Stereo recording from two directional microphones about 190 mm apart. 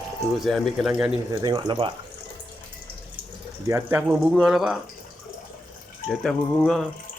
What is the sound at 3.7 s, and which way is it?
Speech, 10° right (ahead or behind).